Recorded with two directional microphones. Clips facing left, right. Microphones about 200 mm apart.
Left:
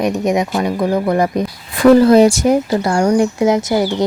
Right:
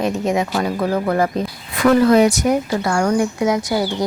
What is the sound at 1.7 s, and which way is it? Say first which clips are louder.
Speech: left 5 dB; 30° left (ahead or behind).